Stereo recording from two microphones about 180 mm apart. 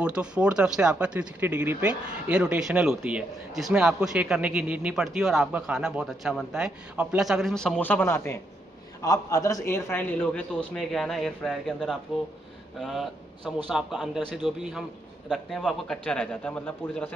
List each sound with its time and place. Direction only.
0.0 s a man's voice: 5° right (ahead or behind); by 17.1 s 10° left (ahead or behind)